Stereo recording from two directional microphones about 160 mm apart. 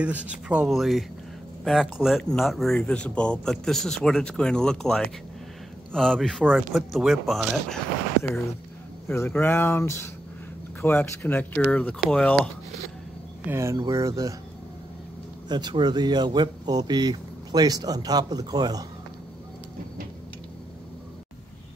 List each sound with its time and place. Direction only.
0.0 s speech: 10° right (ahead or behind)
9.1 s speech: 15° left (ahead or behind)
13.5 s speech: 20° right (ahead or behind)
15.4 s speech: 25° right (ahead or behind)